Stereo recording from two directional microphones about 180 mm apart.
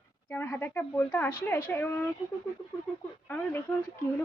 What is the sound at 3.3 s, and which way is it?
Speech, 10° left (ahead or behind).